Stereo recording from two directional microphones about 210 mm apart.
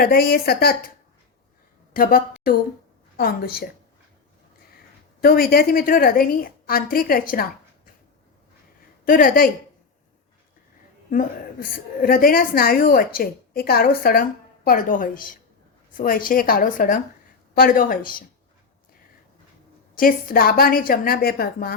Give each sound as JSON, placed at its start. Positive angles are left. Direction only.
{"t": 0.0, "sound": "a woman's voice", "side_deg": 45}
{"t": 1.9, "sound": "a woman's voice", "side_deg": 40}
{"t": 5.2, "sound": "a woman's voice", "side_deg": 45}
{"t": 9.0, "sound": "a woman's voice", "side_deg": 40}
{"t": 11.7, "sound": "a woman's voice", "side_deg": 40}
{"t": 20.0, "sound": "a woman's voice", "side_deg": 40}